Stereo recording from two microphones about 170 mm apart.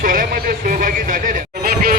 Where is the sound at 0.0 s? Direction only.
55° right (ahead or behind).